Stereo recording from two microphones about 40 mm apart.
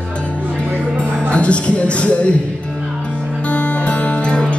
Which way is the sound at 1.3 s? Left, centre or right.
Left.